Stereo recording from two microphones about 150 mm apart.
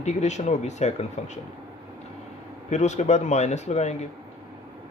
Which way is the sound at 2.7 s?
50° left (ahead or behind).